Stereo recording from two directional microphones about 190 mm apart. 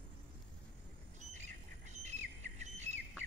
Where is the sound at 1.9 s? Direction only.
35° right (ahead or behind).